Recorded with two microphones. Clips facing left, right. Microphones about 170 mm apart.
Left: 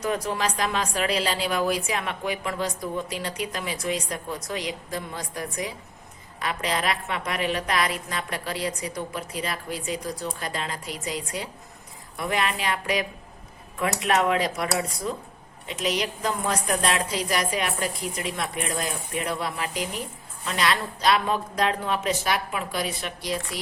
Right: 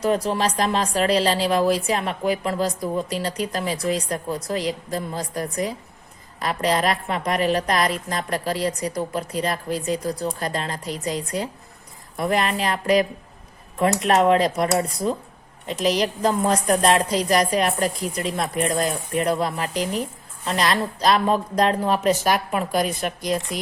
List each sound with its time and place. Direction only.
0.0 s a woman's voice: 30° right (ahead or behind); by 23.1 s 45° right (ahead or behind)